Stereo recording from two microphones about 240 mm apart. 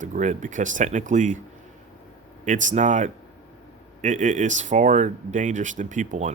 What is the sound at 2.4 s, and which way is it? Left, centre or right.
Speech, right.